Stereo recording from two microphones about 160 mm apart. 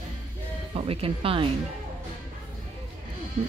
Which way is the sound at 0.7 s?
35° right (ahead or behind).